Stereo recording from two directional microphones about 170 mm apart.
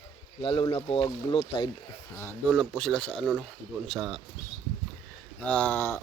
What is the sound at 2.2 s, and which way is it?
Speech, 5° left (ahead or behind).